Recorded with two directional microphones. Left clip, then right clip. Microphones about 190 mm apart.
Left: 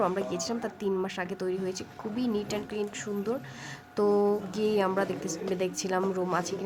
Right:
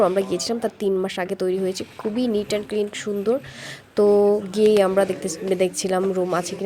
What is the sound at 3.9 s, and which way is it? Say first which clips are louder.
Speech: right 9 dB; 20° right (ahead or behind).